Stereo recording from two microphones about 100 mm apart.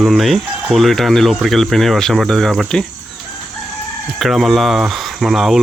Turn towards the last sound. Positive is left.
turn(degrees=-5)  # may be behind; listen again after turning